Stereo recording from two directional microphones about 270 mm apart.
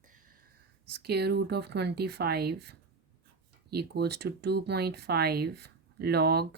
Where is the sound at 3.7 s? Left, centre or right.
Right.